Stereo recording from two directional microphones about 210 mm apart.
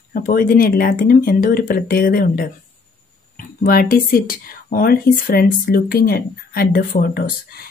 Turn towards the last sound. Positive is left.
turn(degrees=45)  # may be behind; listen again after turning